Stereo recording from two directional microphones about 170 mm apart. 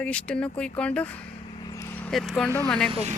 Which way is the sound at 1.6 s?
25° left (ahead or behind).